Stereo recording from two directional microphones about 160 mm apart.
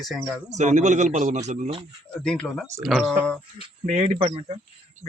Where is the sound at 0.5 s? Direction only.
45° right (ahead or behind).